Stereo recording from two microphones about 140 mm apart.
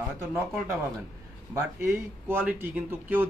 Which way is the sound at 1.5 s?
15° right (ahead or behind).